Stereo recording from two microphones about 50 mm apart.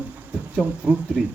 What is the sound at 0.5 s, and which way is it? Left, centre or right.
Speech, right.